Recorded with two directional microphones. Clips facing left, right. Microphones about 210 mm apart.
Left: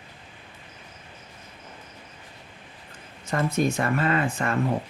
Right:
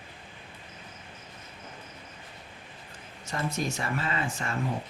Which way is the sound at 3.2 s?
55° left (ahead or behind).